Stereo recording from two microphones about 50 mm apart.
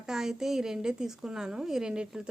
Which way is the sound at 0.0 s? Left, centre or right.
Centre.